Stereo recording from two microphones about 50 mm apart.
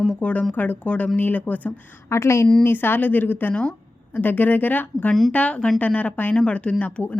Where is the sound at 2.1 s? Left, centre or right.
Left.